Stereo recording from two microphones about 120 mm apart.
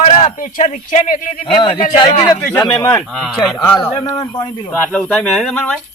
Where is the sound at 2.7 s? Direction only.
25° left (ahead or behind).